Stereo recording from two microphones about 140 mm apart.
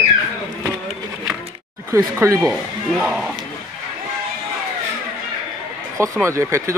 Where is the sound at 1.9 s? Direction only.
20° right (ahead or behind).